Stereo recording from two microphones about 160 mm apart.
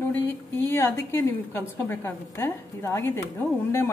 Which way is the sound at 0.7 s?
15° left (ahead or behind).